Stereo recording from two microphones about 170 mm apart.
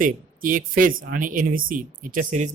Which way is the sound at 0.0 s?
50° right (ahead or behind).